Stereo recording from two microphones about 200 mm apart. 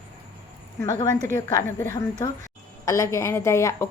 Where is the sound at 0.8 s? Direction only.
15° left (ahead or behind).